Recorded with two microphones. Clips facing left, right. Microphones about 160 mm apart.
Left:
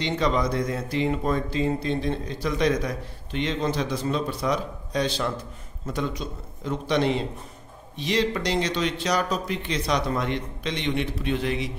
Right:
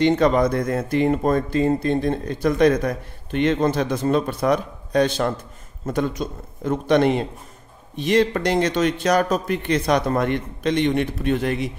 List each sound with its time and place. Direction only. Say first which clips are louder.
0.0 s speech: right 8 dB; 50° right (ahead or behind)